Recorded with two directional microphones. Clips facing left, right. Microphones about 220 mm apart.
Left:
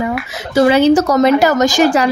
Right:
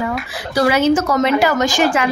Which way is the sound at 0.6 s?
30° left (ahead or behind).